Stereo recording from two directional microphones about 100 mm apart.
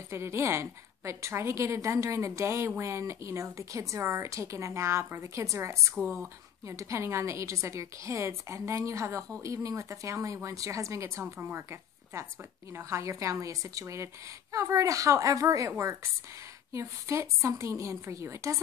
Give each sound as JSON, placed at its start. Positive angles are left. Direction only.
{"t": 0.1, "sound": "a woman's voice", "side_deg": -25}